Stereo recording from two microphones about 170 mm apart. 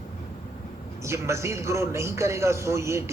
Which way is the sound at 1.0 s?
15° right (ahead or behind).